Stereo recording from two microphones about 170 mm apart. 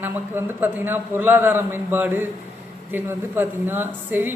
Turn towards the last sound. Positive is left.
turn(degrees=-10)  # may be behind; listen again after turning